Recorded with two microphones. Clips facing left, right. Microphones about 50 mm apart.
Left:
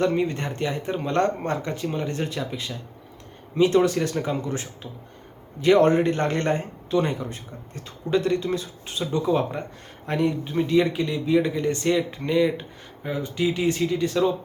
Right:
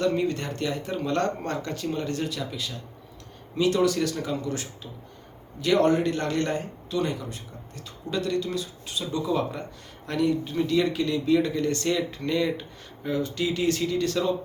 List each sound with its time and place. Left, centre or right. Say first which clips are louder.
0.0 s speech: left 2 dB; left